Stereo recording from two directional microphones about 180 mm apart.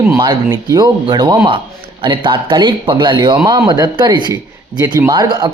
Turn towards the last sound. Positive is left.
turn(degrees=-25)  # may be behind; listen again after turning